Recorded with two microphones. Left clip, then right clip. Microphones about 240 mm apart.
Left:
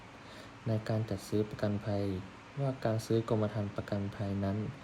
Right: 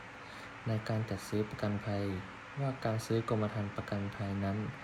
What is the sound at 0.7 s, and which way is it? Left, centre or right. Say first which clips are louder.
Speech: left 2 dB; centre.